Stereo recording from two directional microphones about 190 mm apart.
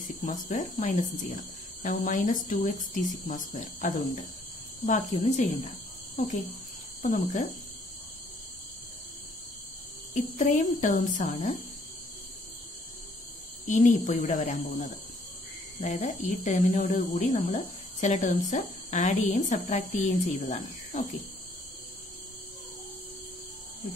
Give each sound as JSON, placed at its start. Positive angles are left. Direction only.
{"t": 0.2, "sound": "speech", "side_deg": 45}
{"t": 7.0, "sound": "speech", "side_deg": 45}
{"t": 10.1, "sound": "speech", "side_deg": 40}
{"t": 13.7, "sound": "speech", "side_deg": 40}